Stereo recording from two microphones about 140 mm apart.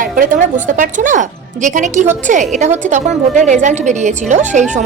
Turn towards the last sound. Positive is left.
turn(degrees=-60)  # may be behind; listen again after turning